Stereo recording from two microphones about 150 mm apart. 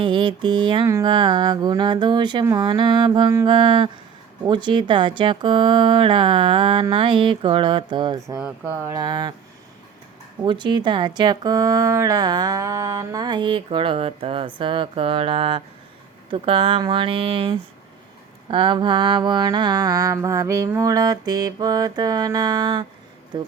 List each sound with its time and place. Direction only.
0.0 s speech: 30° right (ahead or behind)
8.4 s mantra: 10° right (ahead or behind); by 9.3 s 25° right (ahead or behind)
10.4 s speech: 30° right (ahead or behind)
18.5 s mantra: 35° right (ahead or behind)